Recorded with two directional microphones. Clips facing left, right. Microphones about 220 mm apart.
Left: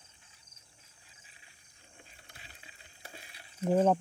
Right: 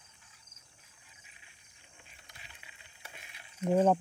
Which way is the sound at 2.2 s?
35° left (ahead or behind).